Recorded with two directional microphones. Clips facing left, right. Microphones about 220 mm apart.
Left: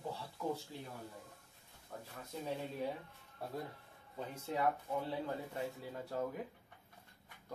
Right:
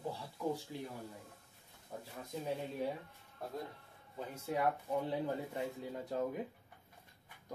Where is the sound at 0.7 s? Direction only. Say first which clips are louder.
Right 5 dB; 15° right (ahead or behind).